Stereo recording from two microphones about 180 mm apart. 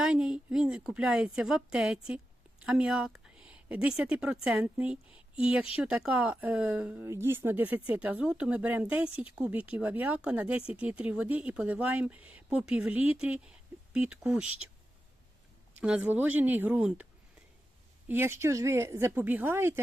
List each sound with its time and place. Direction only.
0.0 s speech: 5° right (ahead or behind)
15.8 s speech: 5° right (ahead or behind)
18.1 s speech: 15° right (ahead or behind)